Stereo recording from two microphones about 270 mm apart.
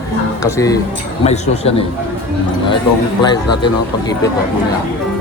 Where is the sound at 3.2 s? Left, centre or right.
Centre.